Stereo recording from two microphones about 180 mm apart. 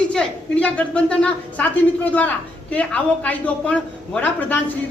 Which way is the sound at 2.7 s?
5° left (ahead or behind).